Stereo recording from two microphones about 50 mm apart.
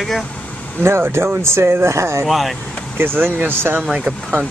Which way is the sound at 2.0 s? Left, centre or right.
Right.